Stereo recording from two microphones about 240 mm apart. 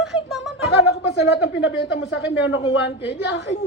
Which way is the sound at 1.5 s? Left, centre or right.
Left.